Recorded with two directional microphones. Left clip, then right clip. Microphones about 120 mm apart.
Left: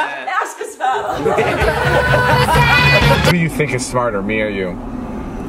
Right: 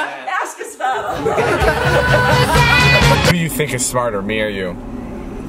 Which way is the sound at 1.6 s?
Centre (ahead or behind).